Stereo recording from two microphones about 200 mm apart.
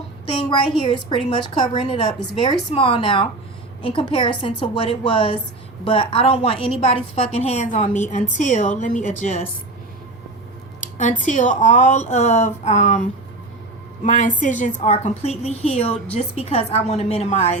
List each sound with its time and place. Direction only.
0.3 s a woman's voice: 25° left (ahead or behind)
11.3 s a woman's voice: 40° left (ahead or behind)
14.0 s a woman's voice: 40° left (ahead or behind)